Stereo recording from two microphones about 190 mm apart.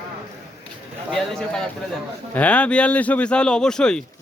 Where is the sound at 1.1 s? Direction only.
5° left (ahead or behind).